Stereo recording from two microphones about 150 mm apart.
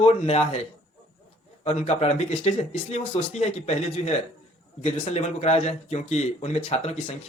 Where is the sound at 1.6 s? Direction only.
45° left (ahead or behind).